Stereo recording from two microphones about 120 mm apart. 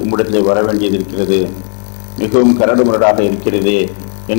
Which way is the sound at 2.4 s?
20° left (ahead or behind).